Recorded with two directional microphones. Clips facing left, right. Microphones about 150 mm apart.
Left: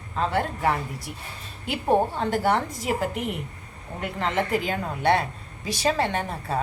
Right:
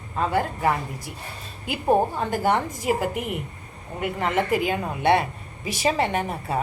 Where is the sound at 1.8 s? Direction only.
5° right (ahead or behind).